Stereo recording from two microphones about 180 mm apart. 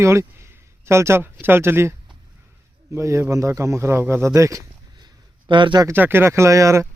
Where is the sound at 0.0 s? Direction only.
15° right (ahead or behind).